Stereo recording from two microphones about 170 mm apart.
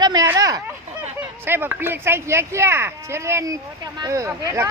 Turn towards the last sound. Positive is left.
turn(degrees=-15)  # may be behind; listen again after turning